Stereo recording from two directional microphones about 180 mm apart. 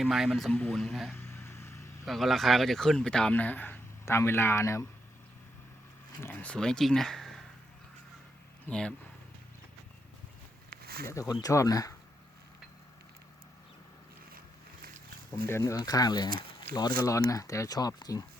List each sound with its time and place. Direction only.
0.0 s speech: centre (ahead or behind)
1.1 s vehicle: 15° left (ahead or behind)
2.0 s speech: centre (ahead or behind); by 4.9 s 15° left (ahead or behind)
6.2 s speech: 5° left (ahead or behind)
8.6 s speech: 5° left (ahead or behind)
10.7 s a sound: 60° right (ahead or behind)
11.1 s speech: 20° left (ahead or behind)
15.4 s speech: 15° left (ahead or behind)